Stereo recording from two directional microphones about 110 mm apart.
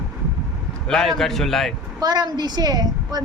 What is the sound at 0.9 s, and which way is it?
Speech, 5° left (ahead or behind).